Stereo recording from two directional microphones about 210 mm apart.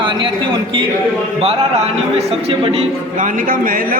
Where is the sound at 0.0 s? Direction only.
25° right (ahead or behind).